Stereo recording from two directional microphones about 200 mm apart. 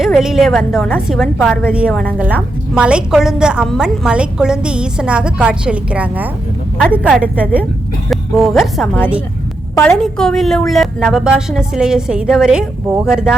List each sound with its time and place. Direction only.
0.0 s a woman's voice: centre (ahead or behind)